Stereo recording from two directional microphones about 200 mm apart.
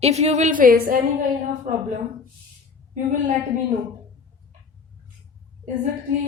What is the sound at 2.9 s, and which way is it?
Speech, 35° right (ahead or behind).